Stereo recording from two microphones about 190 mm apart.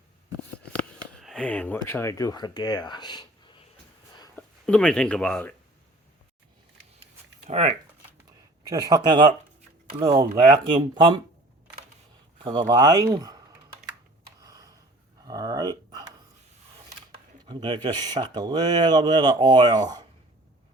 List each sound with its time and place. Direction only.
0.8 s speech: centre (ahead or behind); by 3.7 s 25° left (ahead or behind)
4.4 s speech: 5° left (ahead or behind)
7.4 s speech: 35° right (ahead or behind)
8.6 s speech: 20° right (ahead or behind)
12.4 s speech: 25° right (ahead or behind)
14.4 s tick: 20° right (ahead or behind)
15.2 s a sound: 20° right (ahead or behind)
17.5 s speech: 25° right (ahead or behind)